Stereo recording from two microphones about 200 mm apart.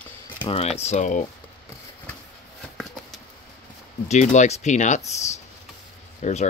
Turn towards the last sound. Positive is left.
turn(degrees=35)  # may be behind; listen again after turning